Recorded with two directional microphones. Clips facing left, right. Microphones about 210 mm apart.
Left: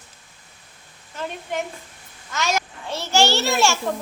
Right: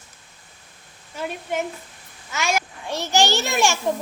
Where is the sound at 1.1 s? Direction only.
10° right (ahead or behind).